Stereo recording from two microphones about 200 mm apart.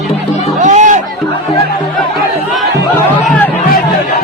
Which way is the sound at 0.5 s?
40° right (ahead or behind).